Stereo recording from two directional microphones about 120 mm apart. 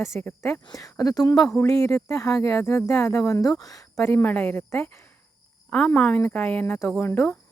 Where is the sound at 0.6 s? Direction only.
30° left (ahead or behind).